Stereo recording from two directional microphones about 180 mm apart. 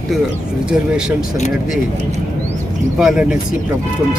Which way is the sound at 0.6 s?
5° right (ahead or behind).